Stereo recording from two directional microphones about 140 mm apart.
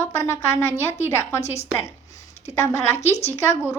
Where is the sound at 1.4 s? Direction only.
50° left (ahead or behind).